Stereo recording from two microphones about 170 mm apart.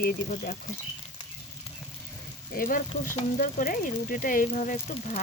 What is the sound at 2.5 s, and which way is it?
Speech, 55° left (ahead or behind).